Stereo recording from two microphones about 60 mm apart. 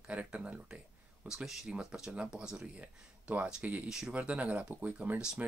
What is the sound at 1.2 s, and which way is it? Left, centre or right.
Speech, centre.